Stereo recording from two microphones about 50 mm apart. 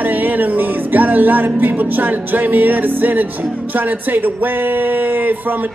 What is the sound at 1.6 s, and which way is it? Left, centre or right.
Speech, right.